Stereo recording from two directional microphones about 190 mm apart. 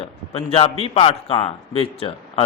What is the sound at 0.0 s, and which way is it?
A man's voice, 30° left (ahead or behind).